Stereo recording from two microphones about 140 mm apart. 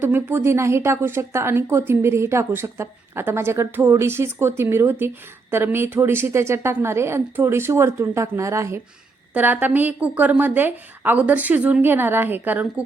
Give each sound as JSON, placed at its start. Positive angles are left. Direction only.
{"t": 0.0, "sound": "a woman's voice", "side_deg": -15}